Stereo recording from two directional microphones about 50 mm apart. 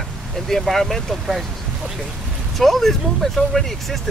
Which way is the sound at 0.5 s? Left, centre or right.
Centre.